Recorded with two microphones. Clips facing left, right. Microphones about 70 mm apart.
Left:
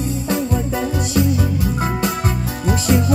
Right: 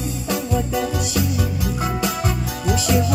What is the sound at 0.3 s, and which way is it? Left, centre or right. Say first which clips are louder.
Music: even; left.